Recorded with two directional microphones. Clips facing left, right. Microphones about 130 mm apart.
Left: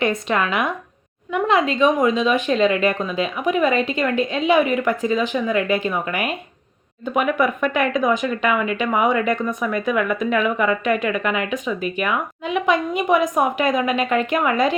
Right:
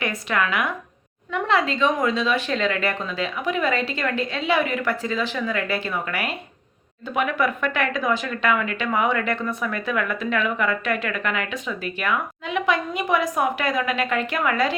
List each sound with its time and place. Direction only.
0.0 s speech: 25° left (ahead or behind)